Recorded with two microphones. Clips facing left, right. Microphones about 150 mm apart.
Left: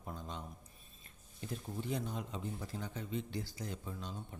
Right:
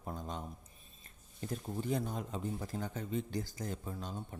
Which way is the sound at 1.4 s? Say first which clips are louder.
Right 3 dB; 40° right (ahead or behind).